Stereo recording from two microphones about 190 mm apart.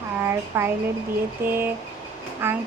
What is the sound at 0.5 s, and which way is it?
A woman's voice, 15° right (ahead or behind).